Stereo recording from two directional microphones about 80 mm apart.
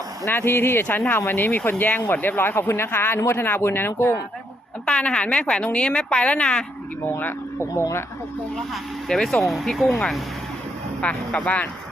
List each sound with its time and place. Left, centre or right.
0.3 s speech: left
4.9 s speech: centre
7.2 s speech: left
8.5 s speech: centre
11.0 s speech: centre